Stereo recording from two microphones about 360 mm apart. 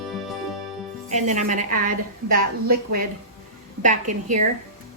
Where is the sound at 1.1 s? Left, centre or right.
Centre.